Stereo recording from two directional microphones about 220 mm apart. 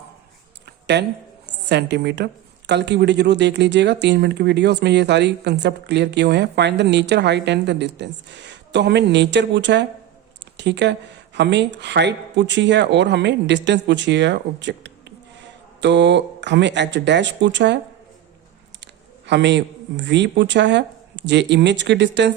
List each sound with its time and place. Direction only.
1.7 s a woman's voice: 50° right (ahead or behind)
19.2 s a woman's voice: 50° right (ahead or behind)